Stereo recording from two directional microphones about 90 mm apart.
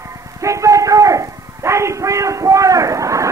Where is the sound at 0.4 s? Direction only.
35° right (ahead or behind).